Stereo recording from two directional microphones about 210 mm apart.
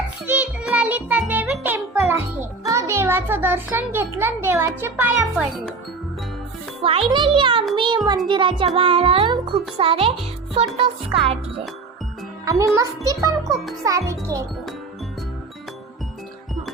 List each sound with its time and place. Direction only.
0.3 s music: 5° right (ahead or behind)
7.1 s a child's voice: 25° right (ahead or behind)
12.5 s a child's voice: 15° right (ahead or behind)